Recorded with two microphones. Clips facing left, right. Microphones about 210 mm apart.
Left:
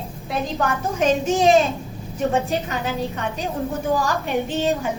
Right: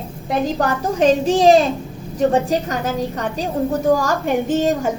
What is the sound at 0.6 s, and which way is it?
A woman's voice, 35° right (ahead or behind).